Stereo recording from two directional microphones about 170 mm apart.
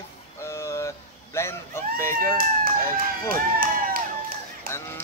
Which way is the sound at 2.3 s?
60° right (ahead or behind).